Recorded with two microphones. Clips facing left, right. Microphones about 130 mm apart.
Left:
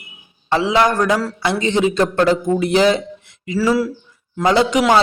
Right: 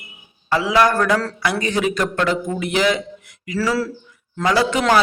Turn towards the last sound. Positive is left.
turn(degrees=15)  # may be behind; listen again after turning